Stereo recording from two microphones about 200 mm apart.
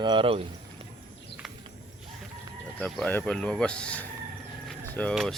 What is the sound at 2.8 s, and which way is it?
Speech, 5° left (ahead or behind).